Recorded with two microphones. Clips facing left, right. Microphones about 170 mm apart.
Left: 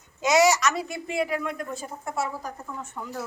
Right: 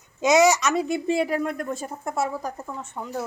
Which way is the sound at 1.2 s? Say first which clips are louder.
Right 4 dB; 45° right (ahead or behind).